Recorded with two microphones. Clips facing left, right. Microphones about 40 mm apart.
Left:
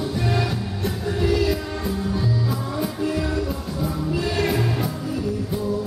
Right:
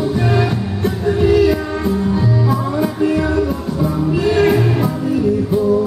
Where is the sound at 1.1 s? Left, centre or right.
Right.